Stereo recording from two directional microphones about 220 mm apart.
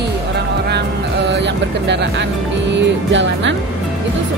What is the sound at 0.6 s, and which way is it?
Speech, 50° right (ahead or behind).